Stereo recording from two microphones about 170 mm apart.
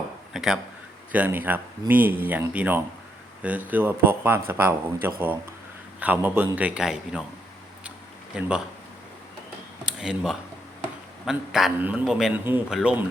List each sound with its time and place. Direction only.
0.3 s a man's voice: 5° right (ahead or behind)
8.4 s a man's voice: 5° right (ahead or behind)
9.8 s a sound: 5° right (ahead or behind)
11.3 s a man's voice: centre (ahead or behind)